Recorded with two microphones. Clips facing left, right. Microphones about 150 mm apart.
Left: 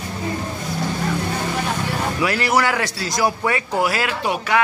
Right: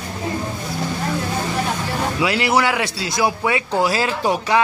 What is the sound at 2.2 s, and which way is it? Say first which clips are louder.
Speech: right 1 dB; 20° right (ahead or behind).